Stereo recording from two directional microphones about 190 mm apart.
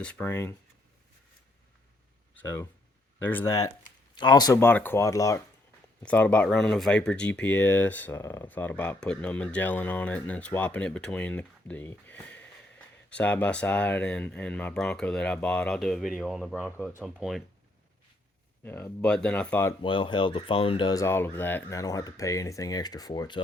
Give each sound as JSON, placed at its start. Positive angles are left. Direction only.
{"t": 0.0, "sound": "speech", "side_deg": 5}
{"t": 2.3, "sound": "speech", "side_deg": 10}
{"t": 18.6, "sound": "speech", "side_deg": 10}
{"t": 19.8, "sound": "speech", "side_deg": 25}